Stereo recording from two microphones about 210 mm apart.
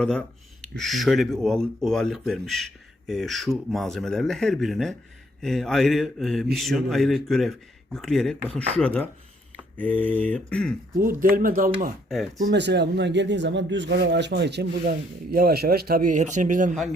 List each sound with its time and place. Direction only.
0.0 s speech: 5° left (ahead or behind)
10.9 s speech: 40° right (ahead or behind)
12.0 s speech: centre (ahead or behind)
12.5 s a man's voice: 55° right (ahead or behind); by 16.7 s 40° right (ahead or behind)